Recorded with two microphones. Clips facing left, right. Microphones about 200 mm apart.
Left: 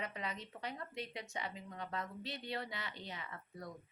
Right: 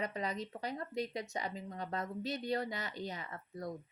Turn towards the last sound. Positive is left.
turn(degrees=-40)  # may be behind; listen again after turning